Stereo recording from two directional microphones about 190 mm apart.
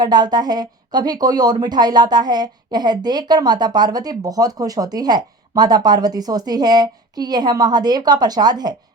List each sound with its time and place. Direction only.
0.0 s a woman's voice: 20° right (ahead or behind)